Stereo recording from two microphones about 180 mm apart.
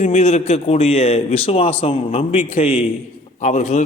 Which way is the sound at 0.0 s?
40° left (ahead or behind).